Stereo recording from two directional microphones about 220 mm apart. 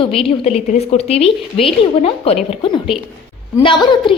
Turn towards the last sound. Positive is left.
turn(degrees=20)  # may be behind; listen again after turning